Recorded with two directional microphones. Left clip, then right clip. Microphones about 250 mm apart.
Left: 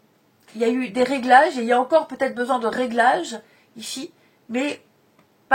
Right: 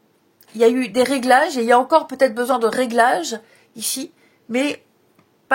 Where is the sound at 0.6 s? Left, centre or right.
Right.